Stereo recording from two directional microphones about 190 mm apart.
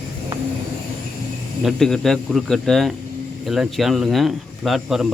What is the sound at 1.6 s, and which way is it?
Speech, centre (ahead or behind).